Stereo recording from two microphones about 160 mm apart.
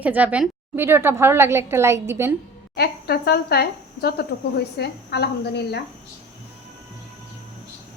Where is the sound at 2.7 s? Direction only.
80° left.